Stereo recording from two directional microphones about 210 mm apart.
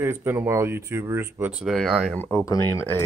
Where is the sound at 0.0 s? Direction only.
10° right (ahead or behind).